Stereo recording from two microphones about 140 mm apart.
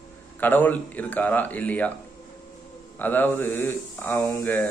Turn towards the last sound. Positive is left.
turn(degrees=15)  # may be behind; listen again after turning